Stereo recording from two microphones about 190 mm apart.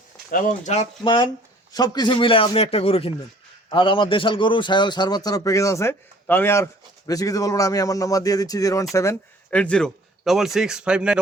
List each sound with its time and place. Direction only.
0.3 s speech: 45° left (ahead or behind)
1.0 s a man's voice: 25° left (ahead or behind); by 11.2 s 5° right (ahead or behind)